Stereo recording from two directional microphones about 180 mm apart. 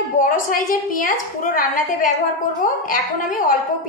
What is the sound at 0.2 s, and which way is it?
A woman's voice, 50° left (ahead or behind).